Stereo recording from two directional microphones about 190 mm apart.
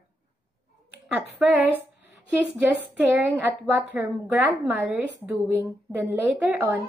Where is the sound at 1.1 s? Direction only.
5° right (ahead or behind).